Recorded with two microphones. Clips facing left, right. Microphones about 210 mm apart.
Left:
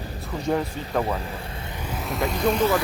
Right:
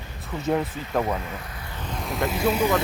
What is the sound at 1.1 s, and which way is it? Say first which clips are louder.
Vehicle: left 1 dB; 30° left (ahead or behind).